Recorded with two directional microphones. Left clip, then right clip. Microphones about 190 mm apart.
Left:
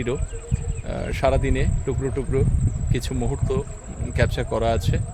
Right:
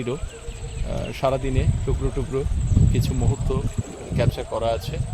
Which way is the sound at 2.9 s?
50° left (ahead or behind).